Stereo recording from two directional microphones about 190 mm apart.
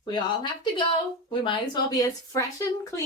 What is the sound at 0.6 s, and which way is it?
Speech, 25° left (ahead or behind).